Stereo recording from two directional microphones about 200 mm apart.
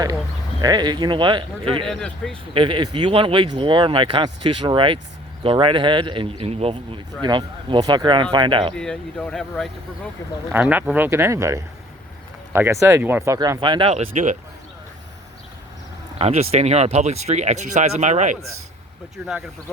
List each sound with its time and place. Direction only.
0.6 s a man's voice: 20° right (ahead or behind)
1.9 s speech: 5° left (ahead or behind)
2.5 s a man's voice: 25° right (ahead or behind)
8.7 s speech: 5° left (ahead or behind)
10.5 s speech: 10° right (ahead or behind); by 14.3 s 35° right (ahead or behind)
16.1 s speech: 30° right (ahead or behind)